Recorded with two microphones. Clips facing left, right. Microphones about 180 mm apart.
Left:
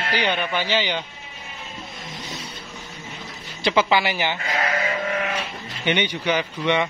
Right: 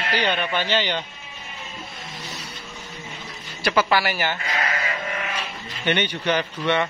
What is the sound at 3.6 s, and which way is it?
Speech, 20° left (ahead or behind).